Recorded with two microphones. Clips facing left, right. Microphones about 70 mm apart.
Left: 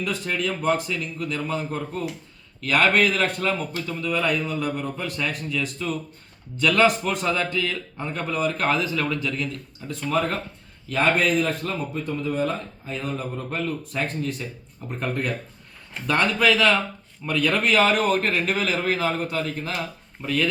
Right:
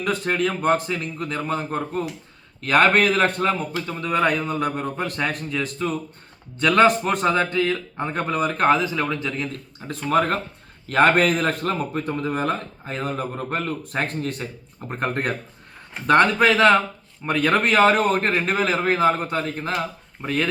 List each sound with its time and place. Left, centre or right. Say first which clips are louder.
0.0 s a man's voice: right 4 dB; right